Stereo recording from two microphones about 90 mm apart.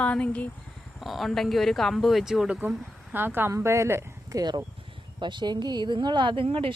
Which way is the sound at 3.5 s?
35° right (ahead or behind).